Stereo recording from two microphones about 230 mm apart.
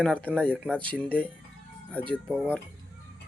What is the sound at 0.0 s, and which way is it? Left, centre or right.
Speech, centre.